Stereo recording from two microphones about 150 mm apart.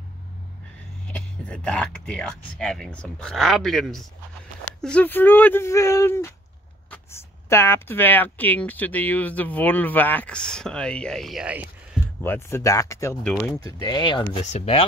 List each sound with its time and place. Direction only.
1.1 s speech: 5° left (ahead or behind); by 12.0 s 10° right (ahead or behind)
12.2 s speech: 15° left (ahead or behind)
13.2 s speech: 5° left (ahead or behind)
13.6 s speech: 20° left (ahead or behind)
14.4 s speech: 45° left (ahead or behind)